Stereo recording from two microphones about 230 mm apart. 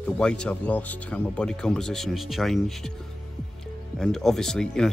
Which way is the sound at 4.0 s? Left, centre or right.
Centre.